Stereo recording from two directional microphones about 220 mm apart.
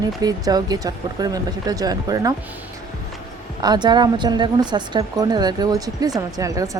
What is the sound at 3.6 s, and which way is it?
Speech, 20° right (ahead or behind).